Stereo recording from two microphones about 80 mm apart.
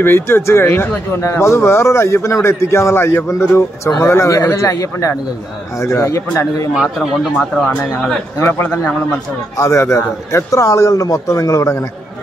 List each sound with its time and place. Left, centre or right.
0.0 s speech: left
8.4 s a man's voice: left
8.6 s a man's voice: centre
9.6 s speech: left